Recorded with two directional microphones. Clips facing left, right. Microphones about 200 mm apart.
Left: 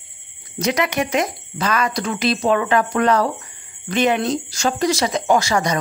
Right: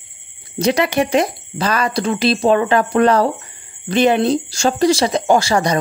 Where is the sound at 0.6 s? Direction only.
30° right (ahead or behind).